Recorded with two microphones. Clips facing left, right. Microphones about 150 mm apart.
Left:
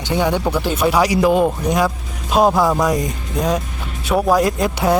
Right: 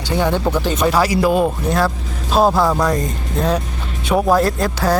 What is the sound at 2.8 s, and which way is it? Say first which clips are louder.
Speech: even; 15° left (ahead or behind).